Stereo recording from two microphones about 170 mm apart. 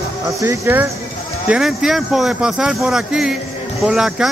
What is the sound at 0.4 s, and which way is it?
Speech, 15° right (ahead or behind).